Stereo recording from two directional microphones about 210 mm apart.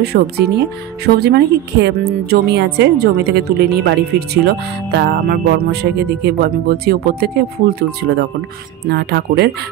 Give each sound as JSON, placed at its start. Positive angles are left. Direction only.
{"t": 0.0, "sound": "speech", "side_deg": -50}